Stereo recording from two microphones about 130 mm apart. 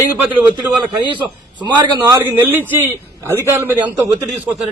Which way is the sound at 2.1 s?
15° right (ahead or behind).